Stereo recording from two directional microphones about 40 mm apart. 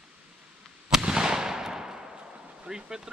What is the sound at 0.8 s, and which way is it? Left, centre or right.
Fireworks, centre.